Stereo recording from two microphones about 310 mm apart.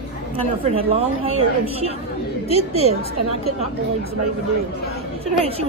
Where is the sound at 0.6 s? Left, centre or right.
Centre.